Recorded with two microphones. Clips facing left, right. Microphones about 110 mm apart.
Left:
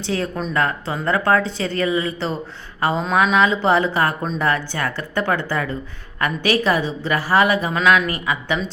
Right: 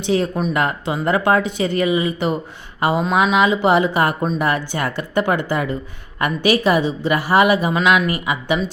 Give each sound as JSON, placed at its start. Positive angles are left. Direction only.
{"t": 0.0, "sound": "speech", "side_deg": -15}